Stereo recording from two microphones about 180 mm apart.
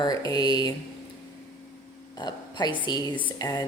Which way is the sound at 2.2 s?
25° left (ahead or behind).